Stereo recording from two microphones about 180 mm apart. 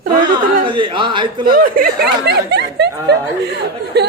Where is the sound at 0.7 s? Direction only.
25° right (ahead or behind).